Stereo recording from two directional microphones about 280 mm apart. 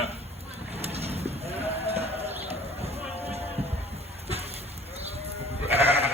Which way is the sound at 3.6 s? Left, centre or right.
Right.